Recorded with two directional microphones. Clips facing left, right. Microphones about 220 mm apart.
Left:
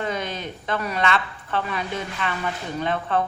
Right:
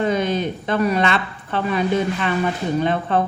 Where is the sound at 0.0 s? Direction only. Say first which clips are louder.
Right 8 dB; 20° right (ahead or behind).